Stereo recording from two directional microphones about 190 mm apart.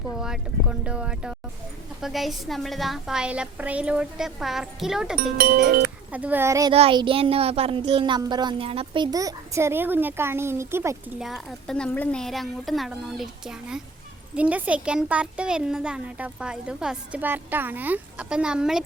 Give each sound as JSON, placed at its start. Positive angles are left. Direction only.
{"t": 0.2, "sound": "speech", "side_deg": -5}
{"t": 5.4, "sound": "speech", "side_deg": -50}
{"t": 6.1, "sound": "speech", "side_deg": -10}
{"t": 6.7, "sound": "speech", "side_deg": -30}
{"t": 11.2, "sound": "speech", "side_deg": 0}